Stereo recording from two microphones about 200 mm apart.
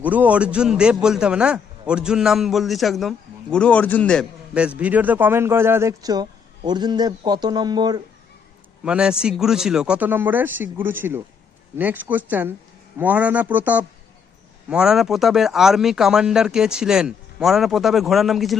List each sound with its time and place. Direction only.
0.0 s a man's voice: 10° right (ahead or behind)
4.8 s a man's voice: 10° right (ahead or behind)
8.8 s a man's voice: 5° right (ahead or behind)